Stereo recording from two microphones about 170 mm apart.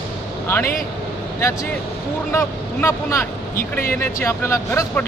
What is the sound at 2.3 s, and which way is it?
Speech, 15° left (ahead or behind).